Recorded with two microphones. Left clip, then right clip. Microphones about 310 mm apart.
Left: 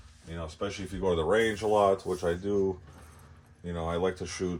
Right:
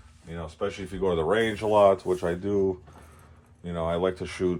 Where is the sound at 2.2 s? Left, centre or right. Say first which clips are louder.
Right 2 dB; right.